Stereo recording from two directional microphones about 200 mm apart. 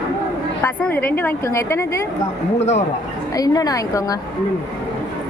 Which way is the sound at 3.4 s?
20° left (ahead or behind).